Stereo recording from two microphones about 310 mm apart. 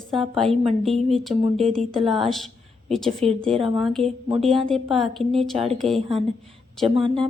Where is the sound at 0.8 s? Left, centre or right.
Centre.